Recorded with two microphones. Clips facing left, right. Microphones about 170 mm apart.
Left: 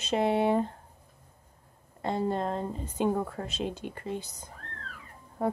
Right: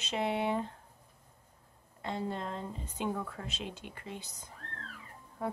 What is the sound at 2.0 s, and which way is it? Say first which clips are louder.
Speech: left 7 dB; 45° left (ahead or behind).